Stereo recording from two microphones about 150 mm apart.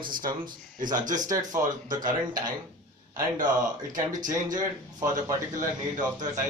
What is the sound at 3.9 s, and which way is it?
Speech, 60° right (ahead or behind).